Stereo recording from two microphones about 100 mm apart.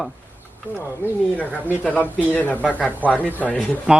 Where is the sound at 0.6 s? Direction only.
20° right (ahead or behind).